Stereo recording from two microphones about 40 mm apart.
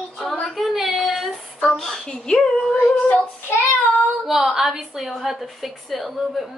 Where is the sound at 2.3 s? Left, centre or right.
Centre.